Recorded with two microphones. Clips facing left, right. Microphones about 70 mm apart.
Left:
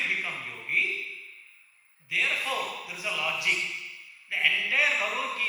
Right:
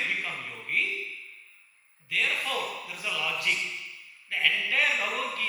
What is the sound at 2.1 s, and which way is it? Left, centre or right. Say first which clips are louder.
A man's voice: even; centre.